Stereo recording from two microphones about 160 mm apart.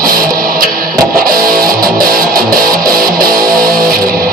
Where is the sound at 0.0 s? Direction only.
65° right (ahead or behind).